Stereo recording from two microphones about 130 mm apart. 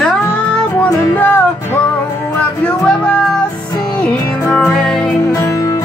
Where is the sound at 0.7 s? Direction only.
15° left (ahead or behind).